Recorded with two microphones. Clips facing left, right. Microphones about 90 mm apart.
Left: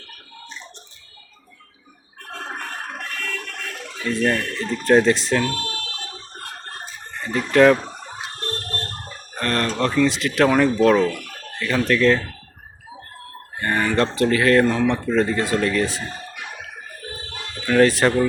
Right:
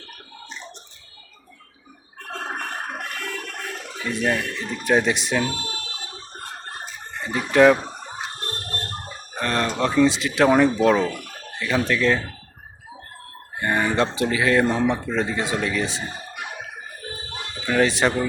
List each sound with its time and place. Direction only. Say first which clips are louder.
2.2 s a sound: right 2 dB; 15° right (ahead or behind)
11.2 s speech: left 1 dB; 15° right (ahead or behind)
13.6 s speech: left 1 dB; 15° right (ahead or behind)
16.0 s music: even; 10° right (ahead or behind)
17.1 s a sound: even; centre (ahead or behind)
17.8 s speech: left 3 dB; 20° right (ahead or behind)